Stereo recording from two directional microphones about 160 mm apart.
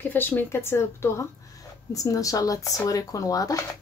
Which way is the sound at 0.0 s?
10° left (ahead or behind).